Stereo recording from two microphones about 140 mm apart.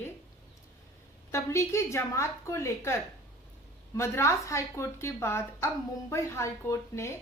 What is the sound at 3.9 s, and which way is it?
A woman's voice, 20° left (ahead or behind).